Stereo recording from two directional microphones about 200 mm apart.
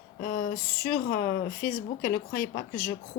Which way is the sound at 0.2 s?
45° left (ahead or behind).